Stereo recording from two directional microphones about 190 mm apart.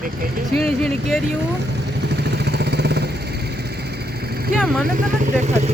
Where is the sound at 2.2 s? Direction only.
60° right (ahead or behind).